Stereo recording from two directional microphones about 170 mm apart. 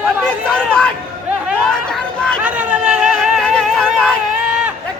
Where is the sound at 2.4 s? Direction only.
5° right (ahead or behind).